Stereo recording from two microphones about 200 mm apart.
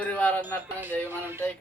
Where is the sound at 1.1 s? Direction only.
10° right (ahead or behind).